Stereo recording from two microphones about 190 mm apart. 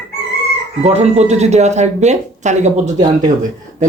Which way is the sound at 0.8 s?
35° right (ahead or behind).